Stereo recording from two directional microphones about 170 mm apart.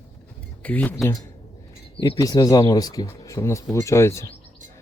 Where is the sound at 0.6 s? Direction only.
10° left (ahead or behind).